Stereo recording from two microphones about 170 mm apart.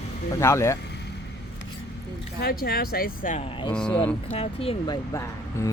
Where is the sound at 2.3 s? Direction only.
65° left (ahead or behind).